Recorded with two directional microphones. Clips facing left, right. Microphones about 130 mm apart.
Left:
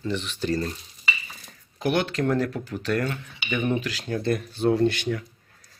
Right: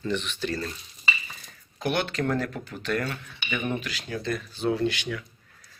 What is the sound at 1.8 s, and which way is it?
Speech, 25° left (ahead or behind).